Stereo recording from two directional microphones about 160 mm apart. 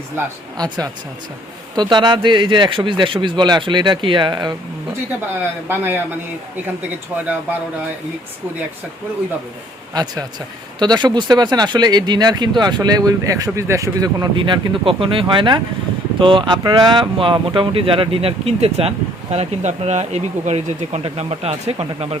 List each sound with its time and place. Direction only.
0.5 s speech: 25° right (ahead or behind)
5.6 s a man's voice: 10° right (ahead or behind)
9.9 s speech: 25° right (ahead or behind)